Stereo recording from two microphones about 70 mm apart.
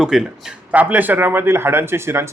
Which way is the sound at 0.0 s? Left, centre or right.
Centre.